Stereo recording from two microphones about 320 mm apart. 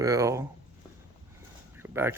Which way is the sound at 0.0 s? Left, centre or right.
Centre.